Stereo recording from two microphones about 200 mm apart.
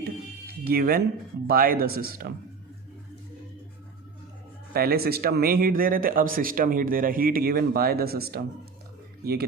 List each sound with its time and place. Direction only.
0.0 s music: 50° right (ahead or behind)
1.5 s a man's voice: 45° right (ahead or behind)
4.7 s a man's voice: 50° right (ahead or behind)